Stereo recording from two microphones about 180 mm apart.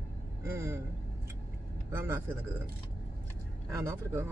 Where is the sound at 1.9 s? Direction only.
15° right (ahead or behind).